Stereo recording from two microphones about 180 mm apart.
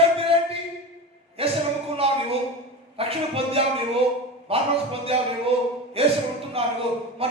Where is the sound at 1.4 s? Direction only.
30° right (ahead or behind).